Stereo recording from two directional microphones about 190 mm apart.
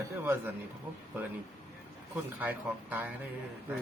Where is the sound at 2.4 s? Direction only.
10° right (ahead or behind).